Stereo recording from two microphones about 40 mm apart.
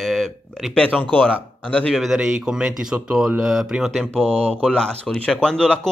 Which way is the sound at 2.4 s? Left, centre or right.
Centre.